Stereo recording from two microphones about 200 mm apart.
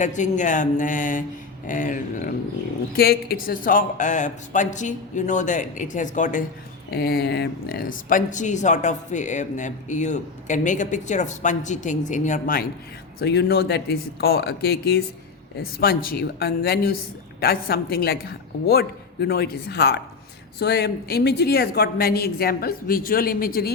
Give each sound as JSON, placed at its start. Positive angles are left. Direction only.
{"t": 0.0, "sound": "speech", "side_deg": 40}
{"t": 6.9, "sound": "speech", "side_deg": 55}
{"t": 13.1, "sound": "speech", "side_deg": 55}